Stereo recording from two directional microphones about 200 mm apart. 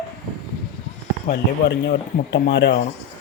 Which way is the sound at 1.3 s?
60° left (ahead or behind).